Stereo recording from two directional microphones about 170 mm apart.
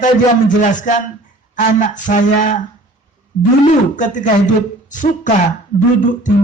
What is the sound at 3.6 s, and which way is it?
A man's voice, 50° left (ahead or behind).